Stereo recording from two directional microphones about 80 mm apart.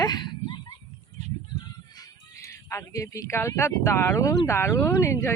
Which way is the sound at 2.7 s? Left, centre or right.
Left.